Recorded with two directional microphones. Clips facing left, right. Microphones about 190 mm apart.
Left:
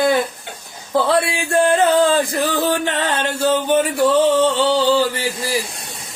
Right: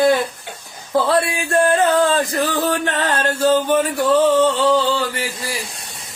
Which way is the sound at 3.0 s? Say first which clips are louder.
Right 1 dB; centre (ahead or behind).